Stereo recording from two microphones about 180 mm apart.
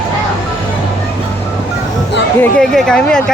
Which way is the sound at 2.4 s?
5° left (ahead or behind).